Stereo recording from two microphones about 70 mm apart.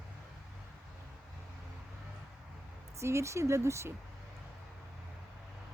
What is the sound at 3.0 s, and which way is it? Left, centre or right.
Speech, right.